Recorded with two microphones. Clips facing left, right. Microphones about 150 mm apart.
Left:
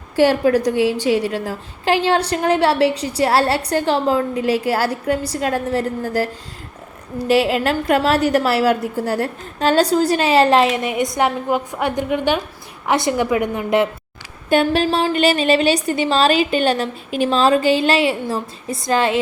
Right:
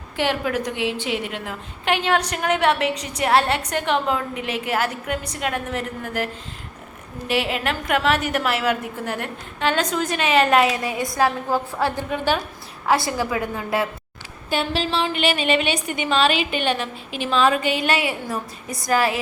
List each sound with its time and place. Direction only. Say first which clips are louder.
0.2 s a woman's voice: left 9 dB; 40° left (ahead or behind)
7.3 s a woman's voice: left 7 dB; 35° left (ahead or behind); by 13.8 s 20° left (ahead or behind)
14.5 s a woman's voice: left 7 dB; 50° left (ahead or behind); by 19.2 s 25° left (ahead or behind)